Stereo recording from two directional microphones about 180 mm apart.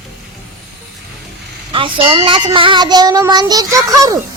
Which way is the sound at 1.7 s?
30° right (ahead or behind).